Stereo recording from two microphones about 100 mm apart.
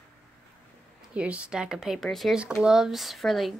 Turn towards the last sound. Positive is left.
turn(degrees=0)  # may be behind; listen again after turning